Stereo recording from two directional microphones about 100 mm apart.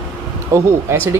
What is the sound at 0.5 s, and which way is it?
Speech, 25° right (ahead or behind).